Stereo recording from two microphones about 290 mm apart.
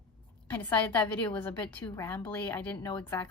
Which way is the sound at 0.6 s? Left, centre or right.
Centre.